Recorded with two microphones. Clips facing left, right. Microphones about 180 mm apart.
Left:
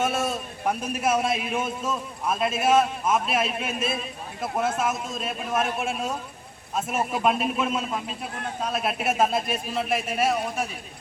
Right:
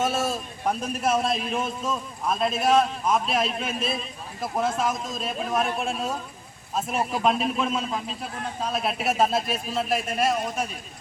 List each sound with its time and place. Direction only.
0.0 s a man's voice: centre (ahead or behind)